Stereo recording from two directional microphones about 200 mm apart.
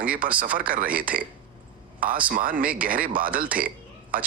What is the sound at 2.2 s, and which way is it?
Speech, 45° right (ahead or behind).